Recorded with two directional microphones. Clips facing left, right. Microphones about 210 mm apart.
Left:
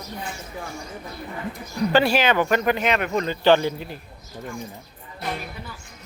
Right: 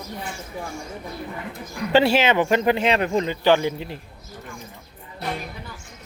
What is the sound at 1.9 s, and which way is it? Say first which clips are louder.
Speech: right 2 dB; 25° right (ahead or behind).